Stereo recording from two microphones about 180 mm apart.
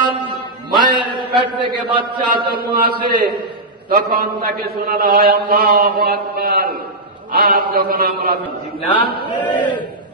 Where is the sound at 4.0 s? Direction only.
60° right (ahead or behind).